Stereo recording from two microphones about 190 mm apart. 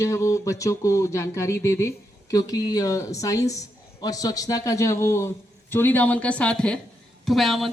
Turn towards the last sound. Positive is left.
turn(degrees=0)  # may be behind; listen again after turning